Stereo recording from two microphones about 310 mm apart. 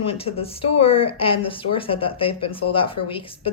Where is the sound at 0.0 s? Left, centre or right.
Centre.